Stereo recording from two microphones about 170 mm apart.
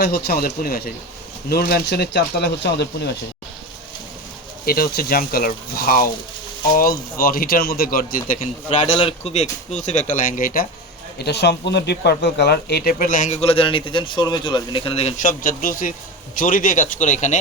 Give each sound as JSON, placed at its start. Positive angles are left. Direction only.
{"t": 0.0, "sound": "speech", "side_deg": 70}
{"t": 4.6, "sound": "speech", "side_deg": 60}
{"t": 8.8, "sound": "speech", "side_deg": 35}
{"t": 11.2, "sound": "speech", "side_deg": 80}